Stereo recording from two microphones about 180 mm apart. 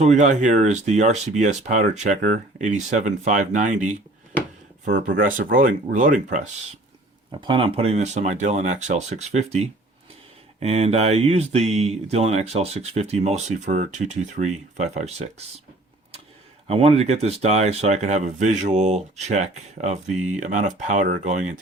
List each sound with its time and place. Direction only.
0.0 s speech: 40° right (ahead or behind)
7.3 s speech: 25° right (ahead or behind)
16.6 s speech: 35° right (ahead or behind)